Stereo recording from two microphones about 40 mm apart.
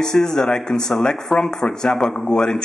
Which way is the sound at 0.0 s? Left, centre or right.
Centre.